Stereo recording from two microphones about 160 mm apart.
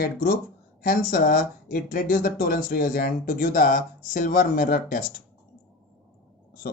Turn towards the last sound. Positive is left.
turn(degrees=60)  # may be behind; listen again after turning